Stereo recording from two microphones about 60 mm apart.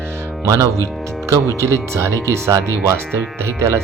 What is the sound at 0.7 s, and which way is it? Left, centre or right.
Speech, right.